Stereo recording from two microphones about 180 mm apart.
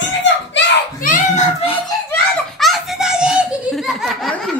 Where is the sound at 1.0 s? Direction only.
40° left (ahead or behind).